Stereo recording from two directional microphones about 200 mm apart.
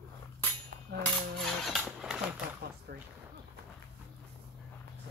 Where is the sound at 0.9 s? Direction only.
55° right (ahead or behind).